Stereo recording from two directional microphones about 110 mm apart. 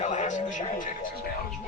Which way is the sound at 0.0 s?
90° left.